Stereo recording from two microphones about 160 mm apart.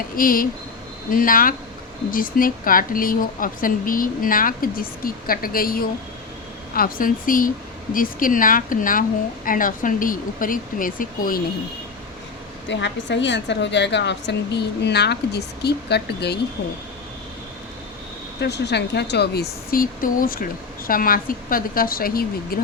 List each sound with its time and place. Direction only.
0.2 s speech: 60° left (ahead or behind)
12.7 s a woman's voice: 90° left
18.3 s a woman's voice: 90° left
19.7 s speech: 60° left (ahead or behind)